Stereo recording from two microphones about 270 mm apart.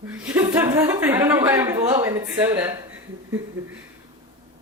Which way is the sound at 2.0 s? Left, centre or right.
Centre.